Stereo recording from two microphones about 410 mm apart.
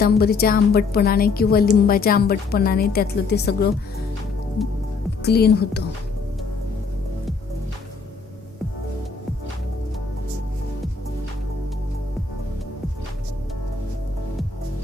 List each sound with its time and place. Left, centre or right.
0.0 s a woman's voice: left
5.2 s a woman's voice: left